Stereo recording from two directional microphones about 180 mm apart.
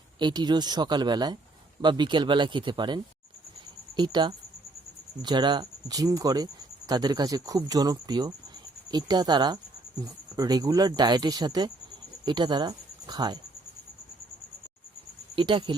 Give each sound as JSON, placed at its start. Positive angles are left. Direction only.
{"t": 0.2, "sound": "speech", "side_deg": -25}
{"t": 15.4, "sound": "speech", "side_deg": -25}